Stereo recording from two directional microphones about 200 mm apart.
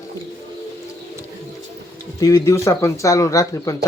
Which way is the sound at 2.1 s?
15° left (ahead or behind).